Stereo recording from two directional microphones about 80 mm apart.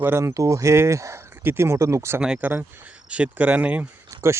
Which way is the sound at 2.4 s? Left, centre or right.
Right.